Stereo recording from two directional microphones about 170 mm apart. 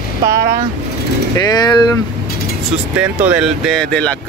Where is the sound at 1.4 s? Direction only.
25° left (ahead or behind).